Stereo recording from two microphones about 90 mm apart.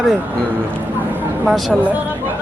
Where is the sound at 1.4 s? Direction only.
Centre (ahead or behind).